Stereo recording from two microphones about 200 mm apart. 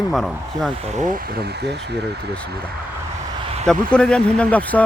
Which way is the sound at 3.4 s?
30° right (ahead or behind).